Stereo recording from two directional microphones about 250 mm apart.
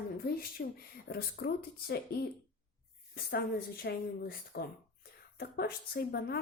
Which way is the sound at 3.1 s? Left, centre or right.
Left.